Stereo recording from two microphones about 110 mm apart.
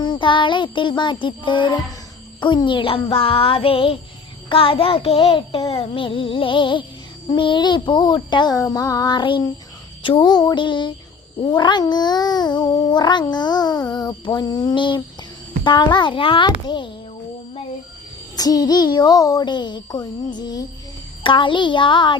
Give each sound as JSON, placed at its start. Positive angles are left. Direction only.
{"t": 0.0, "sound": "a child's voice", "side_deg": 45}
{"t": 2.4, "sound": "music", "side_deg": 45}
{"t": 4.4, "sound": "a child's voice", "side_deg": 55}
{"t": 8.6, "sound": "a sound", "side_deg": 35}
{"t": 10.0, "sound": "a child's voice", "side_deg": 50}
{"t": 11.5, "sound": "a sound", "side_deg": 45}
{"t": 15.6, "sound": "a child's voice", "side_deg": 45}
{"t": 18.3, "sound": "a sound", "side_deg": 35}
{"t": 21.2, "sound": "a child's voice", "side_deg": 50}